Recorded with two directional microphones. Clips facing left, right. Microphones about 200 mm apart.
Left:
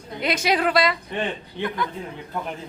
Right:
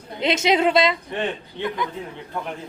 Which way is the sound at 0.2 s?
25° right (ahead or behind).